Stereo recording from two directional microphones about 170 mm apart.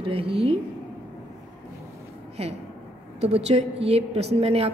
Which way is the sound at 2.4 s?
35° right (ahead or behind).